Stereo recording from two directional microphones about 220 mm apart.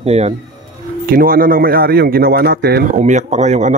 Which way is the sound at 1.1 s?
40° right (ahead or behind).